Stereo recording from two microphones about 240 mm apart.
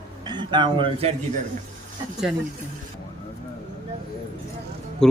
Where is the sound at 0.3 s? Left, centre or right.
Centre.